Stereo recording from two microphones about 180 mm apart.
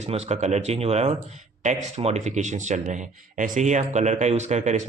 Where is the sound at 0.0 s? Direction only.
35° right (ahead or behind).